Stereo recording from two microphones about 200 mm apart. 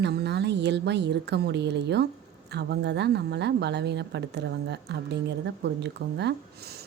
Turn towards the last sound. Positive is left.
turn(degrees=-50)  # may be behind; listen again after turning